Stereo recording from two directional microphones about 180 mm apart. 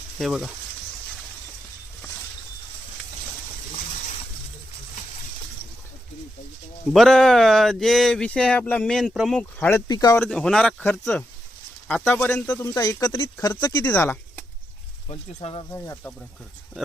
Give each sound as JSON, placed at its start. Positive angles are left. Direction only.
{"t": 0.2, "sound": "speech", "side_deg": 0}
{"t": 6.9, "sound": "speech", "side_deg": 0}
{"t": 10.2, "sound": "speech", "side_deg": 5}
{"t": 15.1, "sound": "speech", "side_deg": 30}
{"t": 15.7, "sound": "speech", "side_deg": 10}